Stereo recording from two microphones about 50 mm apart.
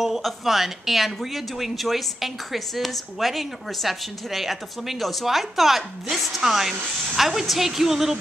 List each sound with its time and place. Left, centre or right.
0.0 s speech: centre